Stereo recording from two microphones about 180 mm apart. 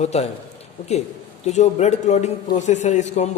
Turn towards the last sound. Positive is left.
turn(degrees=40)  # may be behind; listen again after turning